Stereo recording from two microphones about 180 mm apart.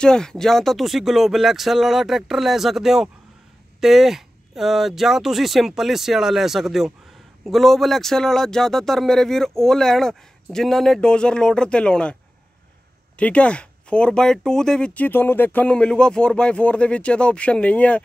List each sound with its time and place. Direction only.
0.0 s speech: 5° left (ahead or behind)
13.2 s speech: 5° left (ahead or behind)